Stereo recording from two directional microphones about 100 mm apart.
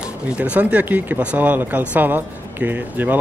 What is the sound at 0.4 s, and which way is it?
Speech, 10° right (ahead or behind).